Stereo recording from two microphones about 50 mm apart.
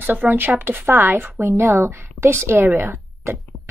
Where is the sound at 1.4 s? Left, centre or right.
Right.